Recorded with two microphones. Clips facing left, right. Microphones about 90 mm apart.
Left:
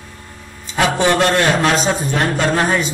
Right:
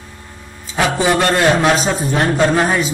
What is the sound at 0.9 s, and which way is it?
A man's voice, 5° right (ahead or behind).